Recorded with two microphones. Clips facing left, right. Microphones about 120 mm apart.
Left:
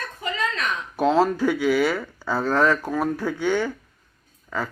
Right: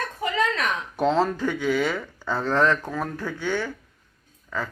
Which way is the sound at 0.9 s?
5° left (ahead or behind).